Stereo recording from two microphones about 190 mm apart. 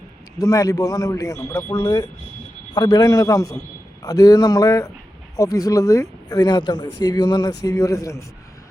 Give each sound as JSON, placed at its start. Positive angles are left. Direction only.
{"t": 0.3, "sound": "a man's voice", "side_deg": 20}